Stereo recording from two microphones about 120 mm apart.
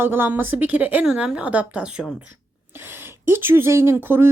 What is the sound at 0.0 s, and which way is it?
A woman's voice, 15° right (ahead or behind).